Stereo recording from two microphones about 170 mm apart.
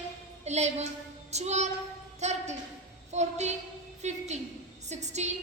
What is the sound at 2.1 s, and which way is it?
Speech, 40° right (ahead or behind).